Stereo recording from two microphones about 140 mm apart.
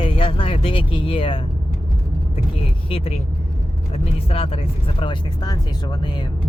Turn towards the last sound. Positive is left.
turn(degrees=35)  # may be behind; listen again after turning